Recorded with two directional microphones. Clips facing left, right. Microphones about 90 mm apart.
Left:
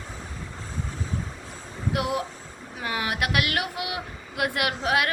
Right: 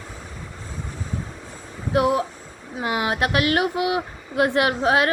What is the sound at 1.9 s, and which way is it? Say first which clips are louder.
Female singing: right 7 dB; 25° right (ahead or behind).